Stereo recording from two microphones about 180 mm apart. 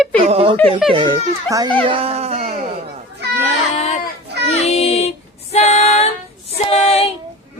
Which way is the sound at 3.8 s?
35° left (ahead or behind).